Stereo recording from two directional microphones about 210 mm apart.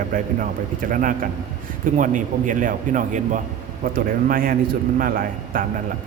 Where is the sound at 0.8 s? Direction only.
40° right (ahead or behind).